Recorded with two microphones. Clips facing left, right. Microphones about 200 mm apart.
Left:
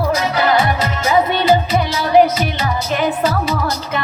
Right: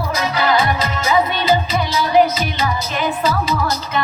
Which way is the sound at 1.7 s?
60° left (ahead or behind).